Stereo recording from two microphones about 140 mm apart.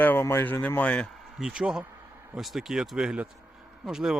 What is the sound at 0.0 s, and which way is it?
Speech, 15° left (ahead or behind).